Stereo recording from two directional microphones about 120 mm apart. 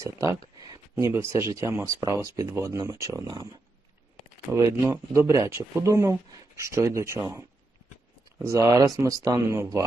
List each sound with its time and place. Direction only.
0.0 s speech: 25° right (ahead or behind)
0.7 s a sound: 35° right (ahead or behind)
1.1 s speech: 20° right (ahead or behind)
4.5 s speech: 25° right (ahead or behind)
8.4 s speech: 30° right (ahead or behind)